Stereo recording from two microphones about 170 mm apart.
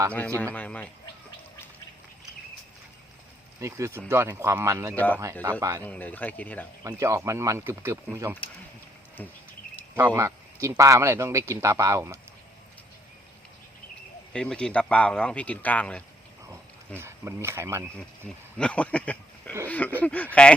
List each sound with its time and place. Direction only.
0.5 s speech: 10° left (ahead or behind)
3.6 s speech: 15° right (ahead or behind)
4.9 s speech: 10° left (ahead or behind)
5.4 s speech: 20° right (ahead or behind)
5.8 s speech: 10° left (ahead or behind)
6.8 s speech: 20° right (ahead or behind)
10.2 s speech: 15° right (ahead or behind)
14.3 s speech: 5° left (ahead or behind)
17.0 s speech: 15° right (ahead or behind)
18.5 s speech: 5° left (ahead or behind)